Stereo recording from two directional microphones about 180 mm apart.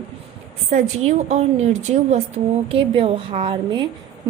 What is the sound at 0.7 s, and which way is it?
A woman's voice, 40° right (ahead or behind).